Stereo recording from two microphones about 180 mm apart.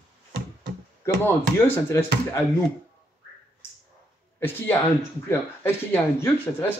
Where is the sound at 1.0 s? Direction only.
15° left (ahead or behind).